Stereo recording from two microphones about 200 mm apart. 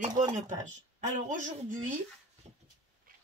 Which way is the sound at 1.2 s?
40° right (ahead or behind).